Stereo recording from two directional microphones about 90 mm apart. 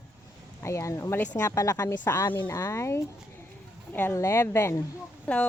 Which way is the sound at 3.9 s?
20° left (ahead or behind).